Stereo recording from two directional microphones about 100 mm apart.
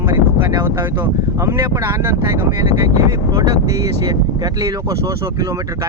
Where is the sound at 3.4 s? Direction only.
40° right (ahead or behind).